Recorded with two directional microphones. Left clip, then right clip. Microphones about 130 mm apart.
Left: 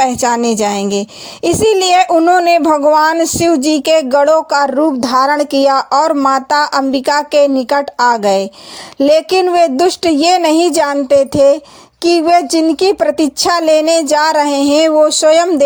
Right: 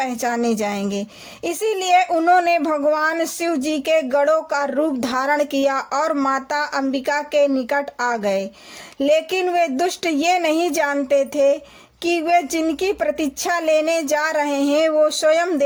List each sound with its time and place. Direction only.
0.0 s speech: 50° left (ahead or behind)
4.7 s a woman's voice: 25° left (ahead or behind); by 15.4 s 45° left (ahead or behind)